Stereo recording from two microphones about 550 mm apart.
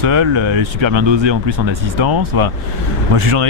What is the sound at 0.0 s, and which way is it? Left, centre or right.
Speech, right.